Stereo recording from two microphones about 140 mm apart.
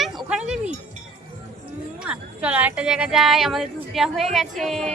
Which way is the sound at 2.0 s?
10° right (ahead or behind).